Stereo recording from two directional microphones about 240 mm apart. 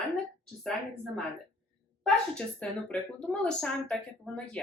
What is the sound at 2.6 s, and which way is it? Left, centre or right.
A woman's voice, centre.